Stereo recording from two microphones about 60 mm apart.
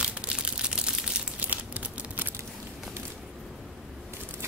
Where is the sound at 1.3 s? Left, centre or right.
Right.